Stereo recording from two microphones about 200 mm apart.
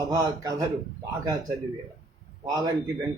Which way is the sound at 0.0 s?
15° right (ahead or behind).